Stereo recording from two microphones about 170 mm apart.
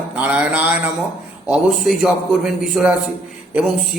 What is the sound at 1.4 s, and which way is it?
A man's voice, 5° right (ahead or behind).